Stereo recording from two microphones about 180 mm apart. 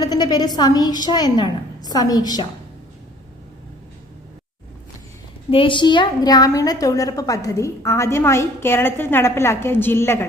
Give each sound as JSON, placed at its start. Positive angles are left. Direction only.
{"t": 0.0, "sound": "a woman's voice", "side_deg": 25}
{"t": 5.5, "sound": "a woman's voice", "side_deg": 30}